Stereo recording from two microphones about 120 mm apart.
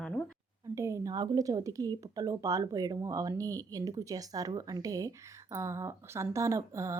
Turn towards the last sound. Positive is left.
turn(degrees=-25)  # may be behind; listen again after turning